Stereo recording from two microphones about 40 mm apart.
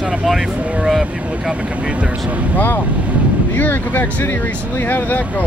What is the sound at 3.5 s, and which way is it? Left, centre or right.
Speech, left.